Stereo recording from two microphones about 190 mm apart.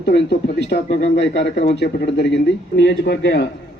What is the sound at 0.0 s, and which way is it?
Speech, 60° left (ahead or behind).